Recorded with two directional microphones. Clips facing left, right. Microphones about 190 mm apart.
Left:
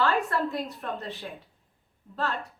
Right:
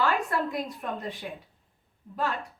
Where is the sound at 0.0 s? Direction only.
15° right (ahead or behind).